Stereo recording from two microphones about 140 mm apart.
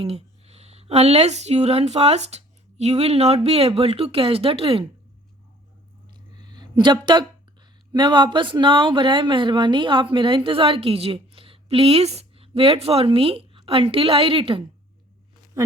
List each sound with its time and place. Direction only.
0.0 s speech: 45° right (ahead or behind)
6.3 s a sound: 30° right (ahead or behind)
7.9 s speech: 35° right (ahead or behind)